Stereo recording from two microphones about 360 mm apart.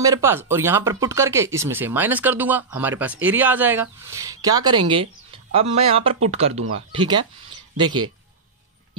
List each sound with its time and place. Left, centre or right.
0.0 s speech: centre